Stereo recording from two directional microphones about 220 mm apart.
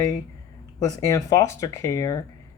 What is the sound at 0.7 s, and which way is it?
Speech, 15° left (ahead or behind).